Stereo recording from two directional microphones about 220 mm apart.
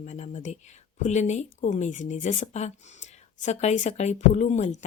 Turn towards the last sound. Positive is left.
turn(degrees=30)  # may be behind; listen again after turning